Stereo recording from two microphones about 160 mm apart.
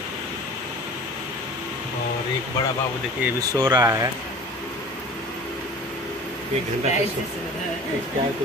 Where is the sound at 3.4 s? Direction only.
20° right (ahead or behind).